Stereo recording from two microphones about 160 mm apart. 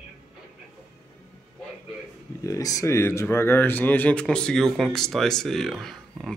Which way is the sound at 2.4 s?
20° left (ahead or behind).